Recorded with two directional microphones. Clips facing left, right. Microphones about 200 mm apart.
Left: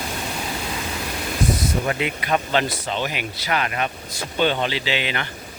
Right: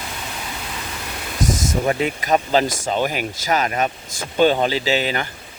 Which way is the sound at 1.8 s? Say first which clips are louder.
Right 4 dB; 35° right (ahead or behind).